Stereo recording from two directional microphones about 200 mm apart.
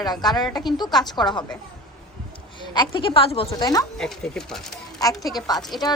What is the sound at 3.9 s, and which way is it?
Speech, 5° left (ahead or behind).